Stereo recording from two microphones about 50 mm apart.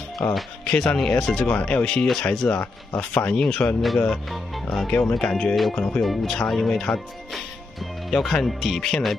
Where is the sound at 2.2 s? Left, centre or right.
Centre.